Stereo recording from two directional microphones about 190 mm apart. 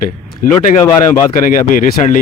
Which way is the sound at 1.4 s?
45° left (ahead or behind).